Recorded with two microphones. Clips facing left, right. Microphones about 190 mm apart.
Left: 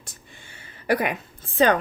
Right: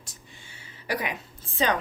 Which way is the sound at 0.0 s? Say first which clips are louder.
Left 2 dB; 55° left (ahead or behind).